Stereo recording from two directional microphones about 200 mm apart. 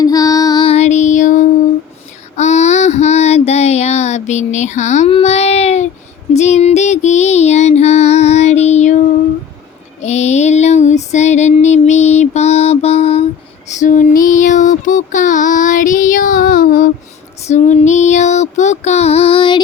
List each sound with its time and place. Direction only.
0.0 s child singing: 20° left (ahead or behind)
6.3 s music: 35° left (ahead or behind)
10.0 s female singing: 35° left (ahead or behind)
13.7 s child singing: 40° left (ahead or behind)
17.4 s female singing: 35° left (ahead or behind)